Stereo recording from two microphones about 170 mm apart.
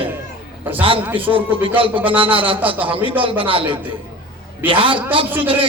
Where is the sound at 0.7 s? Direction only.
30° right (ahead or behind).